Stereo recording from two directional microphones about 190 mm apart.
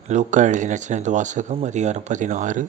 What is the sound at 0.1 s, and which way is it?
Speech, 40° right (ahead or behind).